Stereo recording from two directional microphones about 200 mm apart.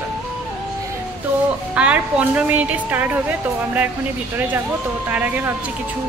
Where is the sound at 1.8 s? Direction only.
5° right (ahead or behind).